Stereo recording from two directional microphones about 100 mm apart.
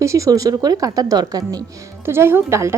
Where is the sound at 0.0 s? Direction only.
30° right (ahead or behind).